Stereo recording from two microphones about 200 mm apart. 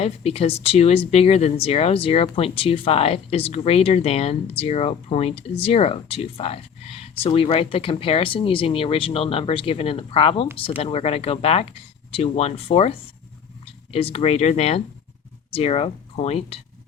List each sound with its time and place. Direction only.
0.0 s speech: 30° left (ahead or behind)